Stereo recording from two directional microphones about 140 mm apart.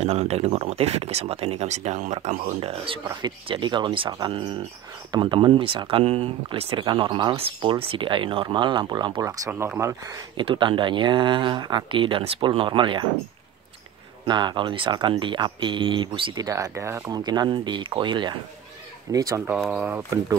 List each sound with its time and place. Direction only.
0.0 s speech: 50° right (ahead or behind); by 10.2 s 20° right (ahead or behind)
10.3 s speech: 35° right (ahead or behind)
14.2 s speech: 35° right (ahead or behind)
16.4 s speech: 25° right (ahead or behind)
17.1 s speech: 30° right (ahead or behind)
19.1 s speech: 25° right (ahead or behind)